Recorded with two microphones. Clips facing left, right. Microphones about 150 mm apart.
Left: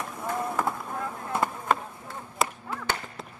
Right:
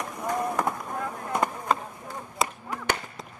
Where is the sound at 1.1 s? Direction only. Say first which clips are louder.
Right 1 dB; 15° right (ahead or behind).